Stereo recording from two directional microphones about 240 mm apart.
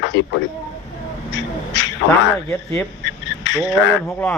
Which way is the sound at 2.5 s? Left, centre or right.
Centre.